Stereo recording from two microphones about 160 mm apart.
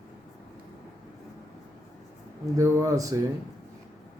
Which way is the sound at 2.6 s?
20° right (ahead or behind).